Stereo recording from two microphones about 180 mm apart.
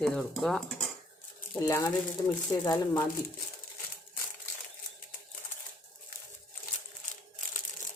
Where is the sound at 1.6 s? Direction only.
20° left (ahead or behind).